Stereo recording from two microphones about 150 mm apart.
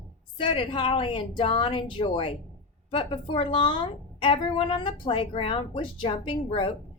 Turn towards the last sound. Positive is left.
turn(degrees=35)  # may be behind; listen again after turning